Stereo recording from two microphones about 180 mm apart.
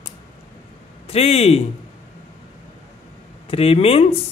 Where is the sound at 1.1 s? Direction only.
35° left (ahead or behind).